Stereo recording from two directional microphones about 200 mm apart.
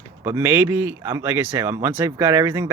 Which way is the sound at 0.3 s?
10° right (ahead or behind).